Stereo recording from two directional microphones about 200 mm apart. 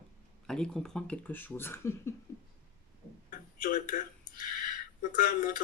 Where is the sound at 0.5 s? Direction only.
5° left (ahead or behind).